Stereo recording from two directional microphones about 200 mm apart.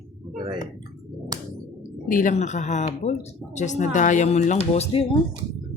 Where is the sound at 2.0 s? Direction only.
40° left (ahead or behind).